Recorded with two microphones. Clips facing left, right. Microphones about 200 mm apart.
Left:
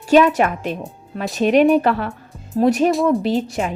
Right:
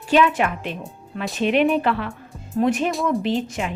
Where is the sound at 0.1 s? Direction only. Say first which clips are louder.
Left 5 dB; 40° left (ahead or behind).